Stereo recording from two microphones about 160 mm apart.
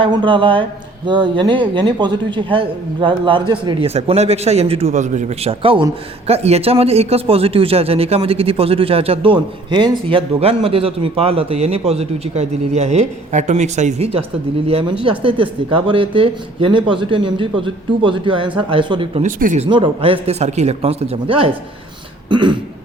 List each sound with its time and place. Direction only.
0.0 s speech: 30° right (ahead or behind)
19.2 s speech: 50° right (ahead or behind)
19.6 s speech: 35° right (ahead or behind)
22.3 s throat clearing: 30° right (ahead or behind)